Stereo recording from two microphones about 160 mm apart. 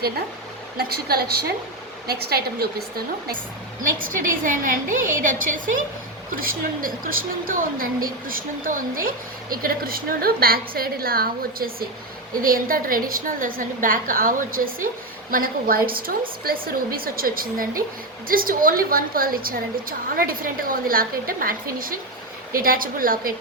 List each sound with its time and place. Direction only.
0.8 s a woman's voice: 75° right (ahead or behind)
3.8 s a woman's voice: 55° right (ahead or behind)